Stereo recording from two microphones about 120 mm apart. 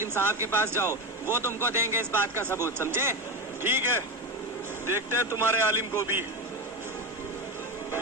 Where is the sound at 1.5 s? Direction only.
20° left (ahead or behind).